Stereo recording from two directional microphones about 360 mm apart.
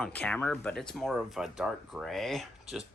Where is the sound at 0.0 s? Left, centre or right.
Centre.